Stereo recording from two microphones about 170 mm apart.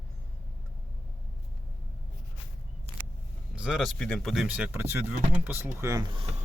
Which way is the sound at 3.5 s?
5° right (ahead or behind).